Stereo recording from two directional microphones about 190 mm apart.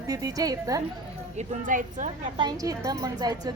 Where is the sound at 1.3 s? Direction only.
45° right (ahead or behind).